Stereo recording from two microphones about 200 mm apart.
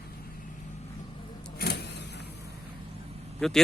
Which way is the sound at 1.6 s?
55° left (ahead or behind).